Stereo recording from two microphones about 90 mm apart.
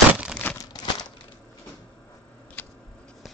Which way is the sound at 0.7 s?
50° left (ahead or behind).